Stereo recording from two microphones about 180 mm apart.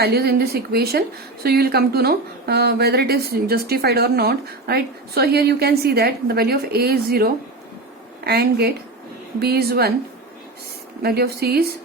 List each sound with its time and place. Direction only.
0.0 s speech: 60° right (ahead or behind)
11.0 s speech: 60° right (ahead or behind)